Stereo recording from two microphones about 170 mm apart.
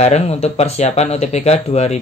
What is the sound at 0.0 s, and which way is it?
Speech, 40° left (ahead or behind).